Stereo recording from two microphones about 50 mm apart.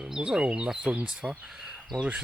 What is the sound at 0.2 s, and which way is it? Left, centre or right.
Speech, centre.